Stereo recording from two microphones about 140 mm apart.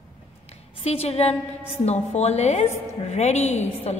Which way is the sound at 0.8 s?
50° left (ahead or behind).